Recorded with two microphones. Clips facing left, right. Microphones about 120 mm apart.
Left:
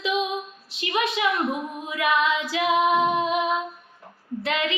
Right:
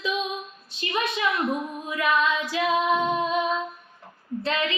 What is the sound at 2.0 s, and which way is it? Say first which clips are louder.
Child singing: left 1 dB; 20° left (ahead or behind).